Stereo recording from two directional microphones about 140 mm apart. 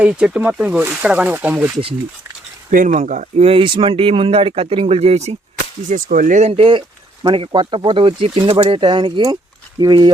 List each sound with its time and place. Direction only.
0.0 s speech: 10° right (ahead or behind)
2.6 s speech: 65° right (ahead or behind)
3.4 s speech: 40° right (ahead or behind)
5.9 s speech: 70° right (ahead or behind)
6.4 s speech: 45° right (ahead or behind)